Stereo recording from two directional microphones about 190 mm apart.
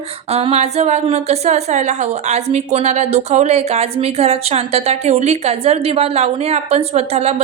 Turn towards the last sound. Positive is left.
turn(degrees=-35)  # may be behind; listen again after turning